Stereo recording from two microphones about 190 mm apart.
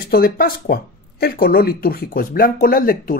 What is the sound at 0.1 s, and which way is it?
Speech, 50° left (ahead or behind).